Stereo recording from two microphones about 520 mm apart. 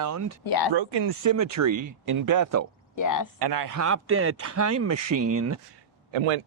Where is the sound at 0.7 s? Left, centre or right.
Right.